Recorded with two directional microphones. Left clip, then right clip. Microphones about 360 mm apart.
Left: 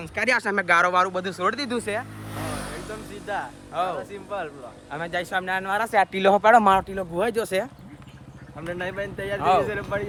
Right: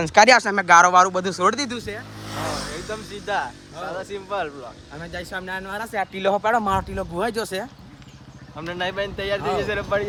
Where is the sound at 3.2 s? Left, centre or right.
Right.